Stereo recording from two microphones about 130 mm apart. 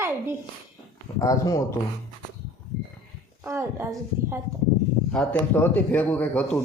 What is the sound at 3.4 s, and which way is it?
A woman's voice, 20° right (ahead or behind).